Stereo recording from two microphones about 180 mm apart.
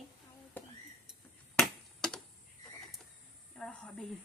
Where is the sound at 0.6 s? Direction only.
10° left (ahead or behind).